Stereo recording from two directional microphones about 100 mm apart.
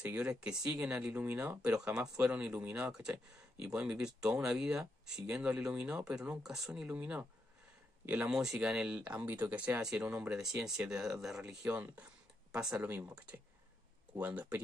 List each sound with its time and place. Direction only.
0.0 s speech: 10° right (ahead or behind)
6.9 s speech: 15° right (ahead or behind)
9.8 s speech: 10° right (ahead or behind)